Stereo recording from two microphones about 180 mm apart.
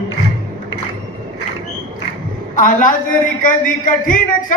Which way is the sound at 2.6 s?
45° left (ahead or behind).